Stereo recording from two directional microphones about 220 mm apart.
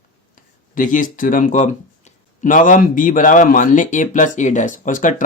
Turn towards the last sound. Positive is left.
turn(degrees=35)  # may be behind; listen again after turning